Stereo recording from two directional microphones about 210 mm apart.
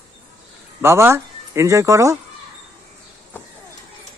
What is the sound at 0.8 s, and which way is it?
Speech, 10° right (ahead or behind).